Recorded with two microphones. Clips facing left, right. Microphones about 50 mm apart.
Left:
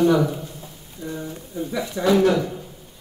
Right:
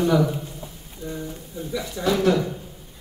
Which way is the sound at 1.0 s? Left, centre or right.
Left.